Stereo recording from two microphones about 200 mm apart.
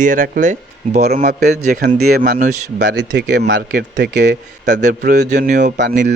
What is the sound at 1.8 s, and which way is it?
Speech, 50° right (ahead or behind).